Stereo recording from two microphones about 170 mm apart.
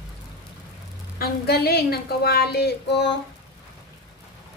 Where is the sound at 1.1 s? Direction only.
65° left (ahead or behind); by 3.1 s 85° left.